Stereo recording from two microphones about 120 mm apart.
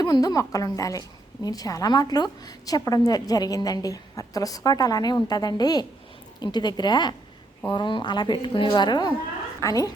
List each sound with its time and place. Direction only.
0.0 s a woman's voice: 35° left (ahead or behind)